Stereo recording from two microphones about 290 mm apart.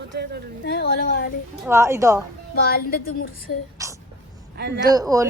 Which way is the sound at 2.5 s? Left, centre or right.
Left.